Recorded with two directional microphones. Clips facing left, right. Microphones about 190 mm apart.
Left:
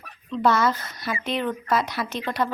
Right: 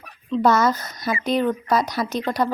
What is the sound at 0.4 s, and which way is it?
Speech, 40° right (ahead or behind).